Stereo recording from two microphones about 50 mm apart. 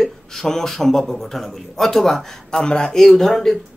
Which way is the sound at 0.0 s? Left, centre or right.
Centre.